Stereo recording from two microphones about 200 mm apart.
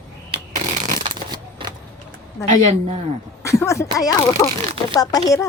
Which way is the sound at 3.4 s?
15° left (ahead or behind).